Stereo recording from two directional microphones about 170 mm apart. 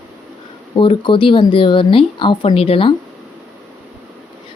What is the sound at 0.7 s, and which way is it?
Speech, 30° left (ahead or behind).